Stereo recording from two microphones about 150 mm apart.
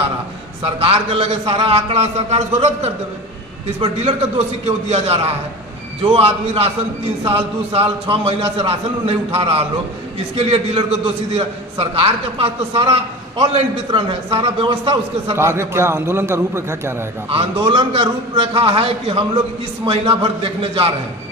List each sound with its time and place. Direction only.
0.6 s a man's voice: 40° right (ahead or behind)
4.6 s a man's voice: 45° right (ahead or behind)
15.3 s a man's voice: 15° right (ahead or behind)
17.3 s a man's voice: 35° right (ahead or behind)